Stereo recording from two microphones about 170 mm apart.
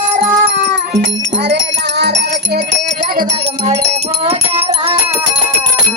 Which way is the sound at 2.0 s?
85° right.